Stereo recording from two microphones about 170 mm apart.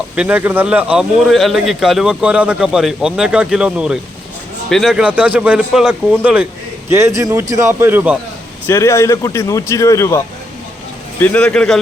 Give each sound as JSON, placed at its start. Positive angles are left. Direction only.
{"t": 0.2, "sound": "a man's voice", "side_deg": -10}
{"t": 8.6, "sound": "speech", "side_deg": 15}